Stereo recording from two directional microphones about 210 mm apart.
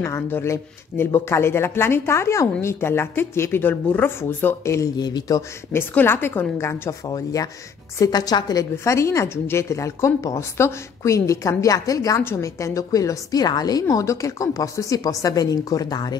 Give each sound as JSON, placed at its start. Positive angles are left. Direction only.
{"t": 0.0, "sound": "a woman's voice", "side_deg": 10}